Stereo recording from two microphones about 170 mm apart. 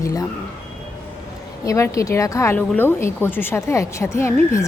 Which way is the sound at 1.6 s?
20° left (ahead or behind).